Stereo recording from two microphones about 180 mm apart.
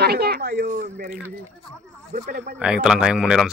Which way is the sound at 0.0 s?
60° right (ahead or behind).